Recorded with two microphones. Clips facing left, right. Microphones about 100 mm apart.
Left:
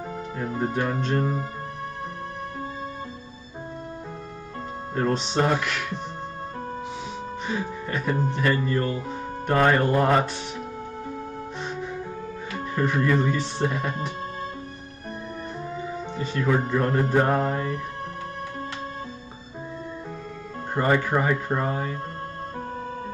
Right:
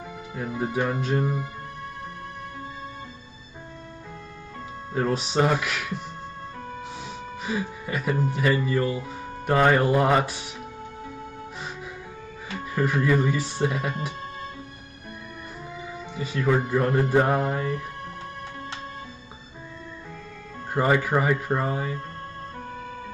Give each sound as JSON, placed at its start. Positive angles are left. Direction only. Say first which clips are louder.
{"t": 1.0, "sound": "speech", "louder": "even", "side_deg": -5}
{"t": 4.9, "sound": "speech", "louder": "even", "side_deg": -5}
{"t": 7.4, "sound": "speech", "louder": "right 1 dB", "side_deg": -5}
{"t": 9.5, "sound": "music", "louder": "right 1 dB", "side_deg": -5}
{"t": 12.5, "sound": "speech", "louder": "even", "side_deg": -5}
{"t": 16.3, "sound": "speech", "louder": "right 1 dB", "side_deg": -5}
{"t": 20.7, "sound": "music", "louder": "even", "side_deg": -5}
{"t": 21.2, "sound": "speech", "louder": "even", "side_deg": 0}